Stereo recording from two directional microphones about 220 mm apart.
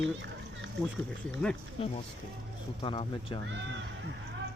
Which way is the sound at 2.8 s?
25° left (ahead or behind).